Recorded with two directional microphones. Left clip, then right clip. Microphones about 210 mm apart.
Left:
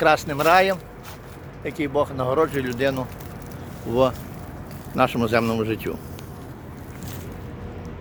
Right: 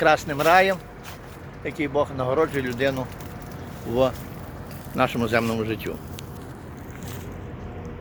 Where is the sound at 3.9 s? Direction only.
15° left (ahead or behind).